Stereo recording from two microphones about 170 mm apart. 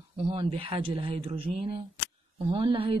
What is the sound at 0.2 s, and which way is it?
A woman's voice, 30° right (ahead or behind).